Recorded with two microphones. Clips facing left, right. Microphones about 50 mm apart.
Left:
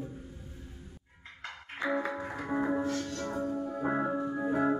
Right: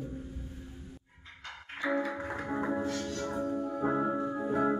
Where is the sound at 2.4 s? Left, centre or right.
Centre.